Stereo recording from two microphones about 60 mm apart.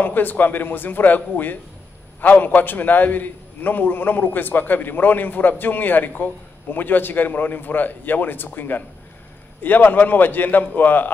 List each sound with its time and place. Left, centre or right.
0.0 s a man's voice: left